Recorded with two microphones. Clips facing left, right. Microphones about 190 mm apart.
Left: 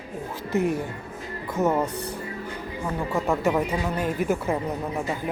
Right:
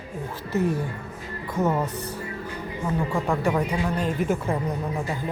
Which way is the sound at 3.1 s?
5° left (ahead or behind).